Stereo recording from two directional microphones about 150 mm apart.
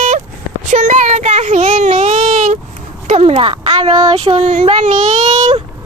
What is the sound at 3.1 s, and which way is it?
Speech, 45° right (ahead or behind).